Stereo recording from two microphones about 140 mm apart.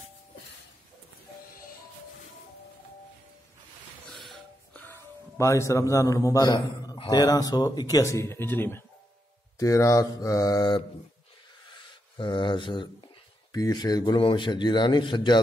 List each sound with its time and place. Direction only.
4.1 s music: 5° left (ahead or behind)
4.8 s a man's voice: 15° left (ahead or behind)
11.7 s a sound: 35° left (ahead or behind)
13.5 s a man's voice: 30° left (ahead or behind)